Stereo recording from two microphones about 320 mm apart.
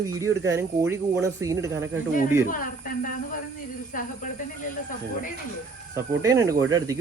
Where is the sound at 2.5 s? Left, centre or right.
Left.